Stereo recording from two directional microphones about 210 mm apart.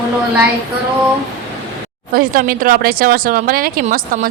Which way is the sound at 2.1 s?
40° right (ahead or behind).